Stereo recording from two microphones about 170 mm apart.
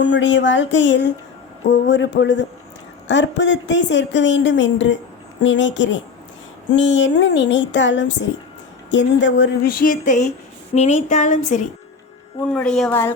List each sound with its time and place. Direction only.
0.0 s speech: 90° left; by 10.3 s 45° left (ahead or behind)
10.8 s music: 45° left (ahead or behind)
12.5 s a woman's voice: 5° left (ahead or behind)